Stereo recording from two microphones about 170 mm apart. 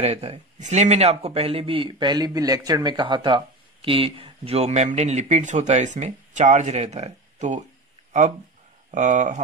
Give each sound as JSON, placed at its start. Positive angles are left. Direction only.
{"t": 0.0, "sound": "speech", "side_deg": -35}
{"t": 8.9, "sound": "speech", "side_deg": -45}